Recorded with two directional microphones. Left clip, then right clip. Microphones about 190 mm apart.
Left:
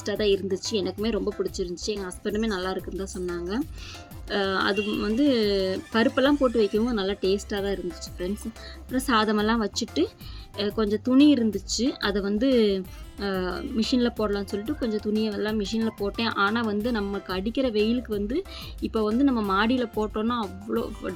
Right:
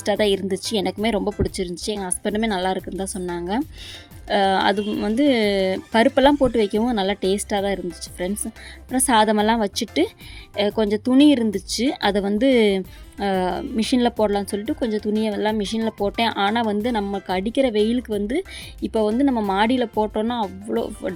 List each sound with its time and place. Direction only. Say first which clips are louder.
0.0 s speech: right 5 dB; 45° right (ahead or behind)
8.9 s speech: right 6 dB; 40° right (ahead or behind)